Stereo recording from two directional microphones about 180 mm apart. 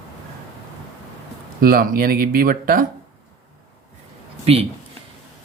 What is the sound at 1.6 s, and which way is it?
Speech, 55° right (ahead or behind).